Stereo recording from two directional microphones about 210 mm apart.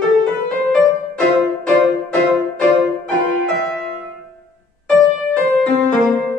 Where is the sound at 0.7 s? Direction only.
Centre (ahead or behind).